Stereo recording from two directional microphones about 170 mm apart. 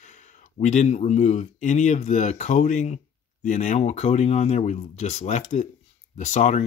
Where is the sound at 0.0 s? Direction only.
45° left (ahead or behind).